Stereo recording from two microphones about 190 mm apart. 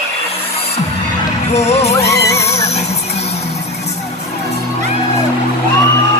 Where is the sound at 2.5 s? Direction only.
35° left (ahead or behind).